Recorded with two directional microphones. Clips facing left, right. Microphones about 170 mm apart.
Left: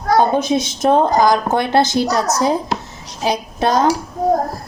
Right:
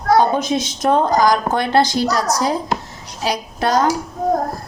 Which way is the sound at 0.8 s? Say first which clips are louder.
Left 1 dB; 25° left (ahead or behind).